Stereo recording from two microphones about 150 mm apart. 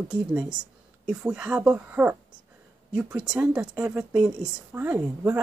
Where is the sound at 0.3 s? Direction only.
5° right (ahead or behind).